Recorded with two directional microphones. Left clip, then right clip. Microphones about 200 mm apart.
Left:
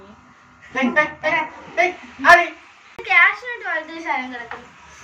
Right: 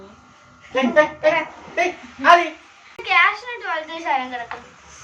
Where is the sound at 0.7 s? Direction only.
45° right (ahead or behind).